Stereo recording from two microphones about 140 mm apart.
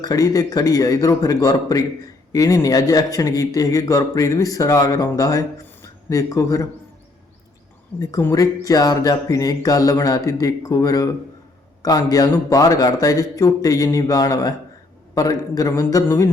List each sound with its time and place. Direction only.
0.0 s a man's voice: 25° left (ahead or behind)
8.2 s a man's voice: 25° left (ahead or behind)